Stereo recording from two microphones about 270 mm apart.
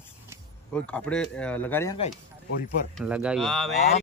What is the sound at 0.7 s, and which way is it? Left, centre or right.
Speech, centre.